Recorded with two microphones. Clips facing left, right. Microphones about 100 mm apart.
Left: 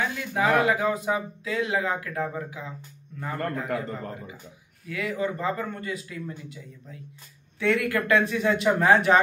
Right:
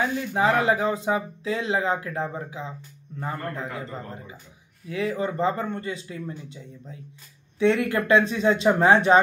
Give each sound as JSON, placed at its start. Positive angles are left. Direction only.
{"t": 0.3, "sound": "speech", "side_deg": -30}
{"t": 4.8, "sound": "speech", "side_deg": -30}